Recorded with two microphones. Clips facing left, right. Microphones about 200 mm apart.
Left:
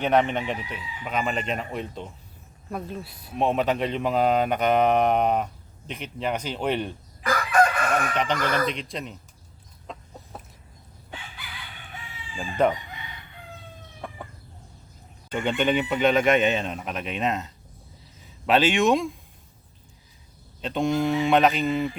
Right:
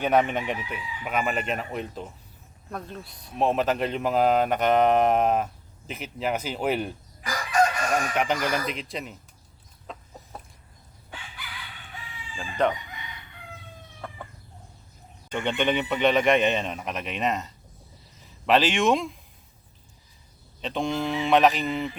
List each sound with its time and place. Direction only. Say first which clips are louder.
0.0 s chicken: left 1 dB; 10° right (ahead or behind)
2.6 s speech: left 4 dB; 5° left (ahead or behind)
7.3 s chicken: left 2 dB; 60° left (ahead or behind)
8.1 s speech: even; 10° right (ahead or behind)
9.8 s chicken: left 1 dB; centre (ahead or behind)
12.4 s chicken: left 2 dB; 5° left (ahead or behind)
14.0 s chicken: left 2 dB; 15° left (ahead or behind)
15.3 s speech: left 2 dB; 5° left (ahead or behind)
20.6 s speech: left 4 dB; centre (ahead or behind)